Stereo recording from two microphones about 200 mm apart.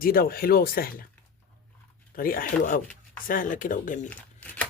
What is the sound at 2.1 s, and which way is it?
Speech, 45° left (ahead or behind).